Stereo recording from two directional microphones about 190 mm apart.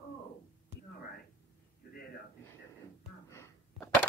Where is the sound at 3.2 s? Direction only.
15° left (ahead or behind).